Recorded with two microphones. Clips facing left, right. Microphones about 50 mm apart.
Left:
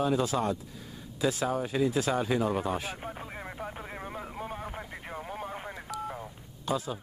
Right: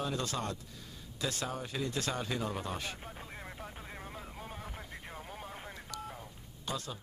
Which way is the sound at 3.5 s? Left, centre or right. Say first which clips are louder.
Left 7 dB; left.